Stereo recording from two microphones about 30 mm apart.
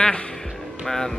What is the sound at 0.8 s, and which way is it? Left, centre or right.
Speech, centre.